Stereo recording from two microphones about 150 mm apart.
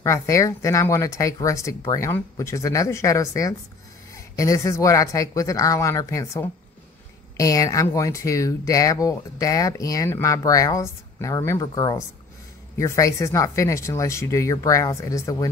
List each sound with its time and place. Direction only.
0.0 s speech: 20° left (ahead or behind)